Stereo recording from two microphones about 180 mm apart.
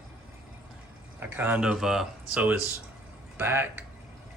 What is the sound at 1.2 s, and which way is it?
Speech, 10° right (ahead or behind).